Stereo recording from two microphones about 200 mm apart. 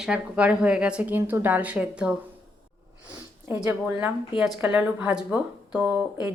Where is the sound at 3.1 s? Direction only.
10° right (ahead or behind).